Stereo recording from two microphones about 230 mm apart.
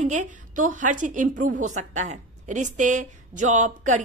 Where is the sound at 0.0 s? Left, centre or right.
Right.